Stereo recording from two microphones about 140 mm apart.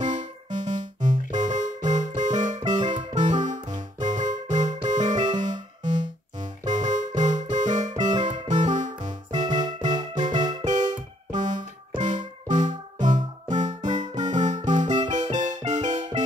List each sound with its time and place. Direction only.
0.0 s music: 60° right (ahead or behind)